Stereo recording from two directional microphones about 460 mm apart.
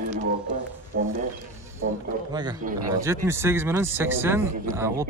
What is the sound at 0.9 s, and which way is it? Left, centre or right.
Speech, right.